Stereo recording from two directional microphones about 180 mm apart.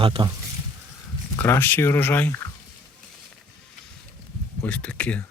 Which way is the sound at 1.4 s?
10° left (ahead or behind).